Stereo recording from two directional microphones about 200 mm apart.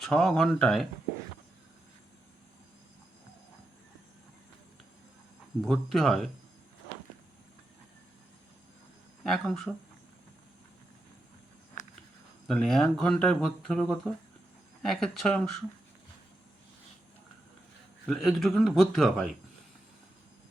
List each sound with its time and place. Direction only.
0.0 s speech: 5° left (ahead or behind)
5.6 s speech: centre (ahead or behind)
9.2 s speech: centre (ahead or behind)
11.8 s insect: 40° left (ahead or behind)
12.5 s speech: centre (ahead or behind)
18.0 s speech: centre (ahead or behind)